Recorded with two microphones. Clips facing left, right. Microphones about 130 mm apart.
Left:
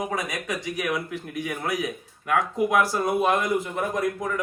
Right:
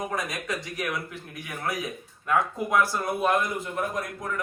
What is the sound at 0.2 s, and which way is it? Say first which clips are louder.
Speech: left 2 dB; centre (ahead or behind).